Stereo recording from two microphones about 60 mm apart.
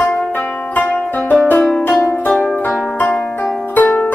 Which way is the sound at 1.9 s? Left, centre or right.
Centre.